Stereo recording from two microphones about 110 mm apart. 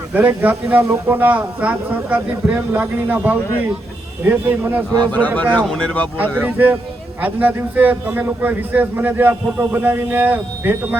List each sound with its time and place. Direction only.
0.1 s speech: 15° right (ahead or behind)
5.1 s speech: 15° left (ahead or behind)
6.1 s speech: 15° right (ahead or behind)